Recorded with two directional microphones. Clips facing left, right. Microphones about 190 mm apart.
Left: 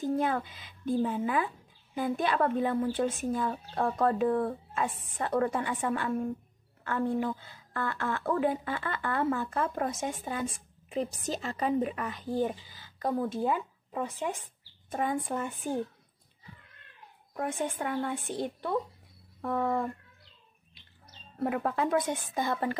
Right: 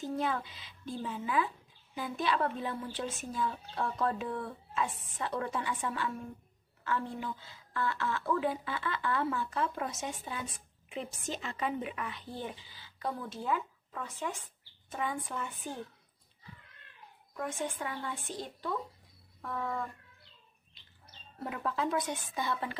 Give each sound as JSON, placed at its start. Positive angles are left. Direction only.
{"t": 0.0, "sound": "a woman's voice", "side_deg": 50}
{"t": 14.9, "sound": "a woman's voice", "side_deg": 50}
{"t": 17.4, "sound": "a woman's voice", "side_deg": 55}
{"t": 21.4, "sound": "a woman's voice", "side_deg": 55}